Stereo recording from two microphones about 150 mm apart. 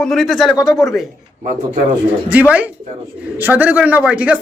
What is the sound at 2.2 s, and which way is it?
A man's voice, 10° right (ahead or behind).